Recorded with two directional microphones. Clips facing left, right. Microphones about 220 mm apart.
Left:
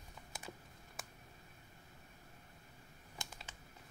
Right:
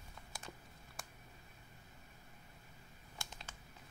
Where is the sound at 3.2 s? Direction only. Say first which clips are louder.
Left 1 dB; 20° left (ahead or behind).